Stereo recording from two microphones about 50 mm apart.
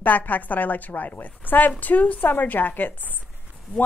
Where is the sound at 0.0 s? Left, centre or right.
Left.